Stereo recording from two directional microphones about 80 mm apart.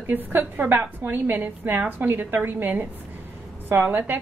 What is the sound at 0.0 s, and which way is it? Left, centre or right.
A woman's voice, right.